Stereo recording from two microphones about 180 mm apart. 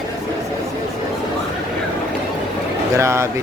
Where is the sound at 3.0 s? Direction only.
15° right (ahead or behind).